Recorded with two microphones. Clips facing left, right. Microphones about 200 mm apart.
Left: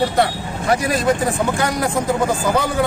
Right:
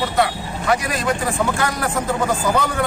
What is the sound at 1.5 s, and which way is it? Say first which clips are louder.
Speech: left 2 dB; 15° left (ahead or behind).